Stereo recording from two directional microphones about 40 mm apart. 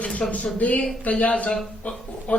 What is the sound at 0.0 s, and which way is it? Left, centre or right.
Speech, left.